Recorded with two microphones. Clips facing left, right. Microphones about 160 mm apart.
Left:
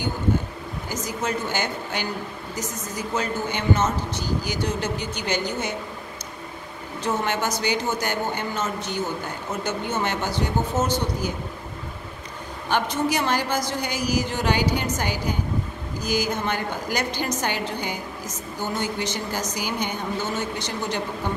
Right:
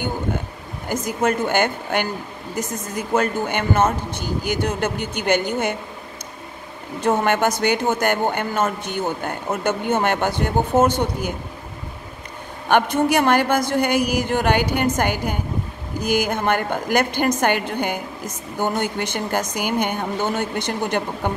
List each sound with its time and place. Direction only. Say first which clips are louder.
0.8 s a woman's voice: right 7 dB; 55° right (ahead or behind)
7.0 s a woman's voice: right 6 dB; 55° right (ahead or behind)
12.6 s a woman's voice: right 6 dB; 55° right (ahead or behind)